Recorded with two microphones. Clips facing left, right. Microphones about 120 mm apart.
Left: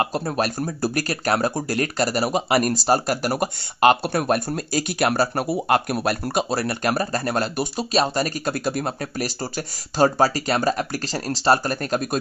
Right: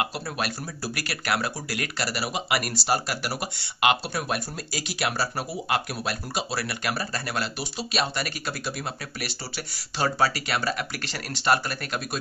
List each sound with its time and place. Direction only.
0.0 s speech: 40° left (ahead or behind)